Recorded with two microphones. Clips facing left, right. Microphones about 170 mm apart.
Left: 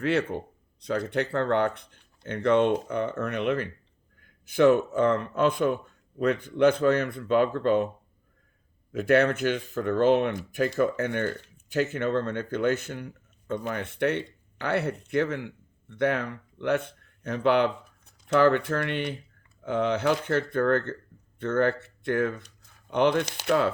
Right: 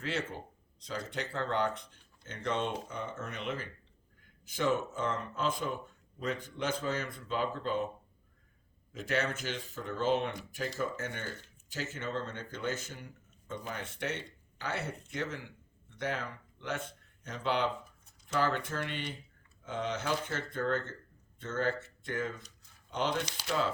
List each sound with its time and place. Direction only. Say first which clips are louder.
0.0 s speech: left 11 dB; 60° left (ahead or behind)
8.9 s speech: left 12 dB; 60° left (ahead or behind)